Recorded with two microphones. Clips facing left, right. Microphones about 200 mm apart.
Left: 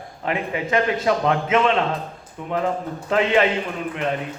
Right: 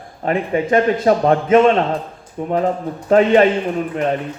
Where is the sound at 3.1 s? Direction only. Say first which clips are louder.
Right 7 dB; 40° right (ahead or behind).